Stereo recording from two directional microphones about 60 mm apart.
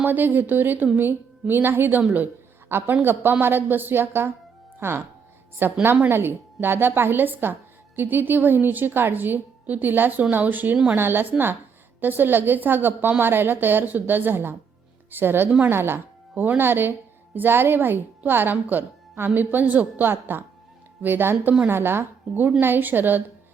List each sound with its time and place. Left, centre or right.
0.0 s speech: right